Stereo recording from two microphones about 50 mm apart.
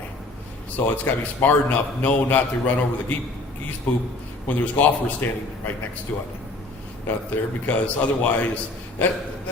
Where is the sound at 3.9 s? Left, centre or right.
Left.